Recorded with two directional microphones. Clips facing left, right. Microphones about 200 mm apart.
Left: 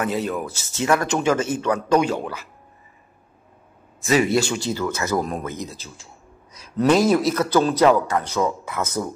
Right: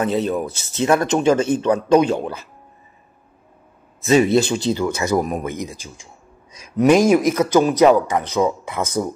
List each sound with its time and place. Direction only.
0.0 s speech: 25° right (ahead or behind)
4.1 s speech: 25° right (ahead or behind)